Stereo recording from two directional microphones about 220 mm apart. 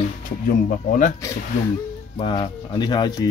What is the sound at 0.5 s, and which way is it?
Speech, 35° left (ahead or behind).